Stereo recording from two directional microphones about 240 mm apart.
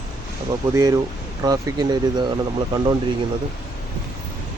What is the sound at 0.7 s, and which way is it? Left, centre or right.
Speech, centre.